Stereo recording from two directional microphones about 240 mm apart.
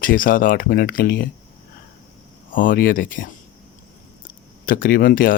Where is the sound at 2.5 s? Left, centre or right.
Left.